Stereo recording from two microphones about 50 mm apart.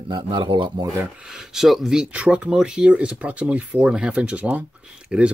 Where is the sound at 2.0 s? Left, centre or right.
Right.